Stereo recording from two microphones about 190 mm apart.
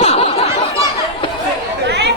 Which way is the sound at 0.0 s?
30° left (ahead or behind).